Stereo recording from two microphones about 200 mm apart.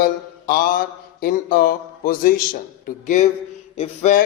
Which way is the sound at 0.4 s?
50° left (ahead or behind).